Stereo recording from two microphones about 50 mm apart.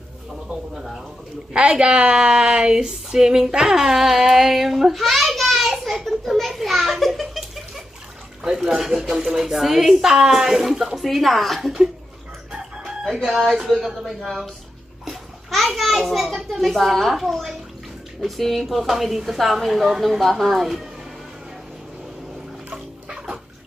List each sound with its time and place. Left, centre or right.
0.4 s a sound: centre
1.5 s a child's voice: centre
13.2 s a woman's voice: centre
14.1 s a woman's voice: centre
22.7 s dog: centre